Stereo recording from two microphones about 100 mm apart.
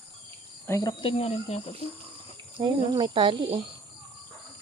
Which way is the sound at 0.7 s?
40° left (ahead or behind).